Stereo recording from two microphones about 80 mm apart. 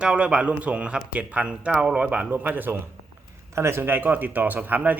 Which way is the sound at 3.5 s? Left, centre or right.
Right.